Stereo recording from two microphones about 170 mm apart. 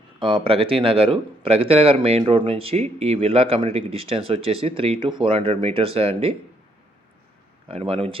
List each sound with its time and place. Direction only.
0.2 s speech: 30° right (ahead or behind)
7.7 s speech: 35° right (ahead or behind)